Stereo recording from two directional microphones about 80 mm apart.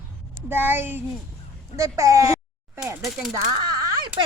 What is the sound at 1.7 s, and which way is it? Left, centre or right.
Speech, right.